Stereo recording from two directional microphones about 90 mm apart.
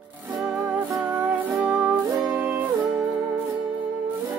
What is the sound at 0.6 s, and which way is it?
Music, 20° right (ahead or behind).